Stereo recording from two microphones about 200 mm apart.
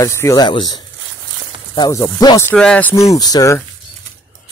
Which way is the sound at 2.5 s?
5° left (ahead or behind).